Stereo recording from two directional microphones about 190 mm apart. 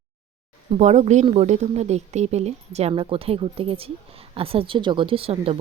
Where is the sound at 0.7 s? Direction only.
35° right (ahead or behind).